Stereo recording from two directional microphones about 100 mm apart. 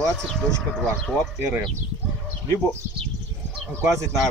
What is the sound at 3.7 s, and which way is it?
Speech, 30° right (ahead or behind).